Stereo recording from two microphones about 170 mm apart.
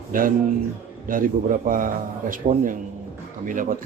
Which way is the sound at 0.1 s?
55° right (ahead or behind).